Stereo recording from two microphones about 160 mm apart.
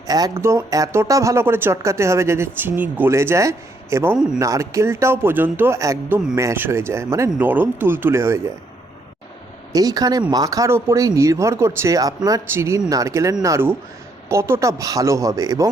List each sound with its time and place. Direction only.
0.1 s speech: 20° right (ahead or behind)
9.7 s speech: 25° right (ahead or behind)